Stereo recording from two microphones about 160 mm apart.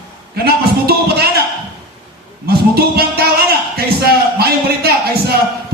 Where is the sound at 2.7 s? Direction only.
75° right (ahead or behind).